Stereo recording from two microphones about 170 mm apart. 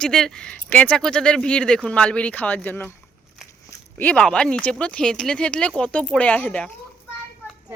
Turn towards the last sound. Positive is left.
turn(degrees=10)  # may be behind; listen again after turning